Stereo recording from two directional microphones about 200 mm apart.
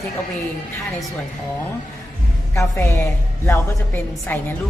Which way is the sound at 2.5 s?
15° left (ahead or behind).